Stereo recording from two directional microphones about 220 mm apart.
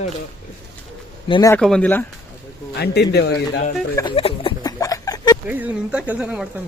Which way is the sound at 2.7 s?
50° left (ahead or behind).